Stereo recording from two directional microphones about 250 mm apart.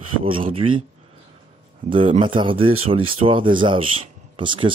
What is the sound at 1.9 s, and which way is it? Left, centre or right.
Speech, right.